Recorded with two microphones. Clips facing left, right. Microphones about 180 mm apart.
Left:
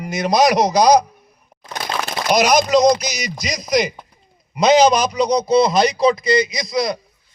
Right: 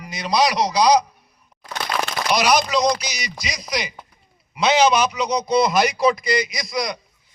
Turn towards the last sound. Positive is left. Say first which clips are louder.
# left 5 dB
turn(degrees=25)  # may be behind; listen again after turning